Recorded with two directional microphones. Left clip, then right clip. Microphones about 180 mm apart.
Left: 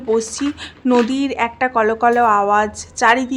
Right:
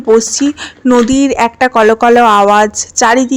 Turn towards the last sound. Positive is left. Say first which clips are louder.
# right 5 dB
turn(degrees=-40)  # may be behind; listen again after turning